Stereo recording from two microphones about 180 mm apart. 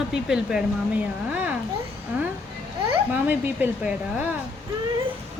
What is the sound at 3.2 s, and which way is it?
Speech, 10° right (ahead or behind).